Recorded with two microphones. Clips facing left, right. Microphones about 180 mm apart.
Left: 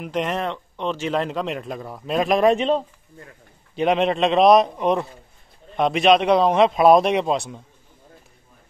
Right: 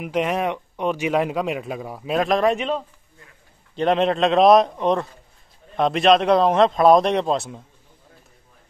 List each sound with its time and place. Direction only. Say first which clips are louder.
0.0 s speech: right 2 dB; 5° right (ahead or behind)
2.4 s speech: left 3 dB; 30° left (ahead or behind)
3.7 s a man's voice: even; 5° left (ahead or behind)